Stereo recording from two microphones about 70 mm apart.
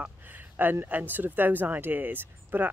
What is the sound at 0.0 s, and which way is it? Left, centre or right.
Speech, right.